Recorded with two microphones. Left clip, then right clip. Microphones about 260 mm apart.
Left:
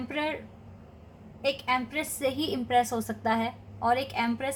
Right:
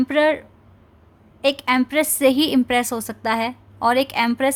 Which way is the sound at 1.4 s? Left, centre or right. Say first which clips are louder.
Right 9 dB; right.